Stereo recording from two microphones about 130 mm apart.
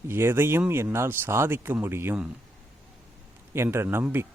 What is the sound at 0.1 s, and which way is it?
Speech, 20° right (ahead or behind).